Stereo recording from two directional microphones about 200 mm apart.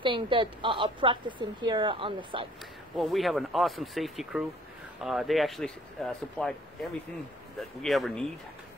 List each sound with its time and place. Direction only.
0.0 s a woman's voice: 25° right (ahead or behind)
3.0 s speech: centre (ahead or behind)